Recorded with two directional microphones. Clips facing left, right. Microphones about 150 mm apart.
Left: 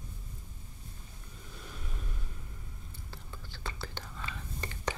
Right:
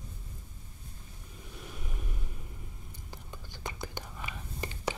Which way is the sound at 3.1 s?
15° right (ahead or behind).